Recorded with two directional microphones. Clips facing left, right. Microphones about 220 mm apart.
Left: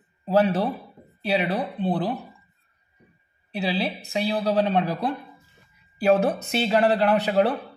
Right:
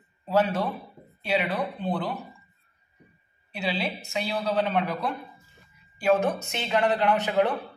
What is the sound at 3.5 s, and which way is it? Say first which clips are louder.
Speech: left 4 dB; 35° left (ahead or behind).